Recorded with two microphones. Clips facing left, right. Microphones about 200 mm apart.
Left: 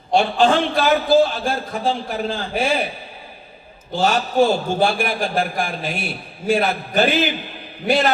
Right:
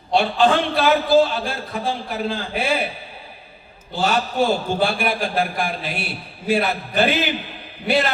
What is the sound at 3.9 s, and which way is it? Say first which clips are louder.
A man's voice: left 3 dB; 45° left (ahead or behind).